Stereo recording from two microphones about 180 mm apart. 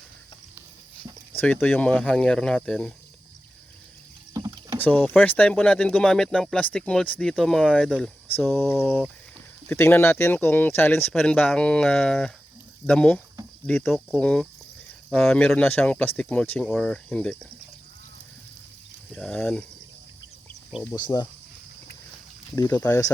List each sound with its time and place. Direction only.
1.4 s speech: 10° left (ahead or behind)
4.4 s rowboat: 20° right (ahead or behind)
4.8 s speech: 5° left (ahead or behind)
19.1 s speech: 5° left (ahead or behind)
20.9 s speech: 20° left (ahead or behind)
22.5 s speech: 20° left (ahead or behind)